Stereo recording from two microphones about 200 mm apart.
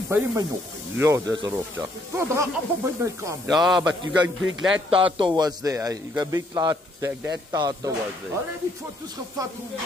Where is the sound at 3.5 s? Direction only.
Centre (ahead or behind).